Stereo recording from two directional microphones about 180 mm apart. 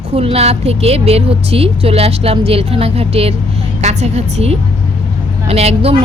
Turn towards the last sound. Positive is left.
turn(degrees=-35)  # may be behind; listen again after turning